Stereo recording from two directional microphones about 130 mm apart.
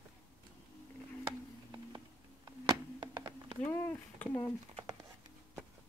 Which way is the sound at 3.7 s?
15° left (ahead or behind).